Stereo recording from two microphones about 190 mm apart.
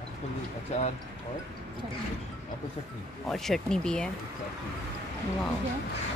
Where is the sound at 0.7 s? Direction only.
35° left (ahead or behind).